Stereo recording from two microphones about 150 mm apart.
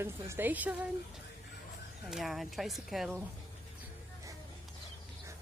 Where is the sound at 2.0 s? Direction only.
Centre (ahead or behind).